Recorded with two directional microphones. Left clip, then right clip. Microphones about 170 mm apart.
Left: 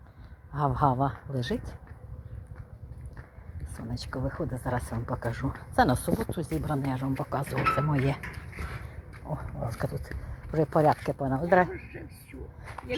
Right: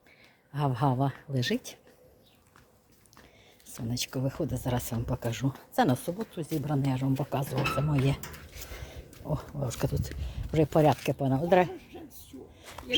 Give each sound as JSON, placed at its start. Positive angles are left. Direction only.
{"t": 0.5, "sound": "speech", "side_deg": -5}
{"t": 1.4, "sound": "speech", "side_deg": -25}
{"t": 3.8, "sound": "speech", "side_deg": -30}
{"t": 6.8, "sound": "speech", "side_deg": -25}
{"t": 7.5, "sound": "speech", "side_deg": 0}
{"t": 9.3, "sound": "speech", "side_deg": -45}